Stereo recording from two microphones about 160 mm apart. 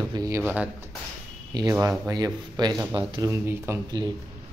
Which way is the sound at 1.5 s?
25° right (ahead or behind).